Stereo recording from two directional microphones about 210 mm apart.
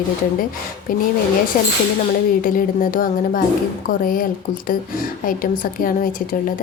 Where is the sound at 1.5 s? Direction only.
40° left (ahead or behind).